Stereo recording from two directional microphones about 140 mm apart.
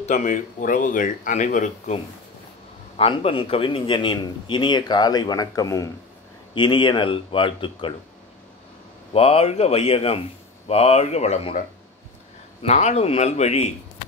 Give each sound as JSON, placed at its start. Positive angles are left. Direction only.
{"t": 0.0, "sound": "speech", "side_deg": 60}
{"t": 3.0, "sound": "a man's voice", "side_deg": 45}
{"t": 9.1, "sound": "speech", "side_deg": 45}
{"t": 12.6, "sound": "speech", "side_deg": 50}